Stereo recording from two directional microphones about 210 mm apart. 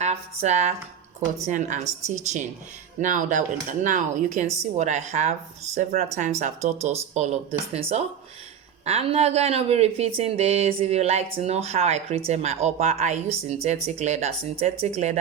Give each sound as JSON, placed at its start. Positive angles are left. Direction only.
{"t": 0.0, "sound": "a woman's voice", "side_deg": -35}